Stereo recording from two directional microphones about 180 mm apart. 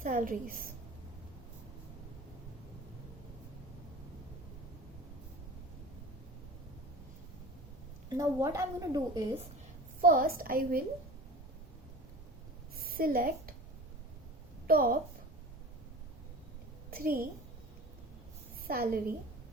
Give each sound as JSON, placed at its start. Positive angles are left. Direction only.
{"t": 0.0, "sound": "a woman's voice", "side_deg": -50}
{"t": 8.1, "sound": "a woman's voice", "side_deg": -20}
{"t": 10.0, "sound": "a woman's voice", "side_deg": -50}
{"t": 12.7, "sound": "a sound", "side_deg": -55}
{"t": 14.7, "sound": "a woman's voice", "side_deg": -55}
{"t": 16.9, "sound": "a woman's voice", "side_deg": -55}
{"t": 18.7, "sound": "a woman's voice", "side_deg": -55}